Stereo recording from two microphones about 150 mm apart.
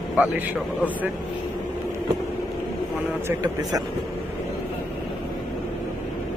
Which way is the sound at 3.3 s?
25° right (ahead or behind).